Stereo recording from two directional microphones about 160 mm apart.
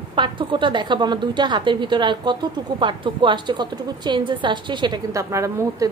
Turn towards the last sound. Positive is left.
turn(degrees=-20)  # may be behind; listen again after turning